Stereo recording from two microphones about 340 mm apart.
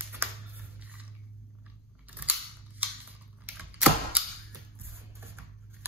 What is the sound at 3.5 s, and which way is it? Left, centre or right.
Camera, centre.